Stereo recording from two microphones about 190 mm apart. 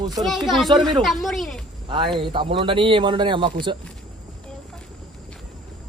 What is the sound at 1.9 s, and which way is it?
Speech, 25° right (ahead or behind).